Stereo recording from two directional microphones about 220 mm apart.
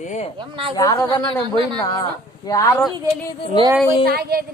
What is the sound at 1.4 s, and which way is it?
Speech, 20° right (ahead or behind).